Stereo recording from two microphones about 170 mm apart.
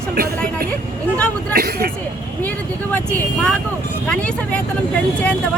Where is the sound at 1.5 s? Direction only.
65° right (ahead or behind).